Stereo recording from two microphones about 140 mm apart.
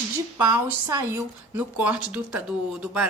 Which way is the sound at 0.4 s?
25° right (ahead or behind).